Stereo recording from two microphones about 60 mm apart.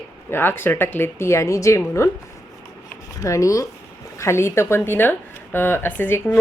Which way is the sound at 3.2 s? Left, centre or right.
Left.